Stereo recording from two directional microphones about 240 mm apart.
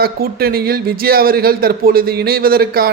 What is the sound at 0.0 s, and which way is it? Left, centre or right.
A man's voice, right.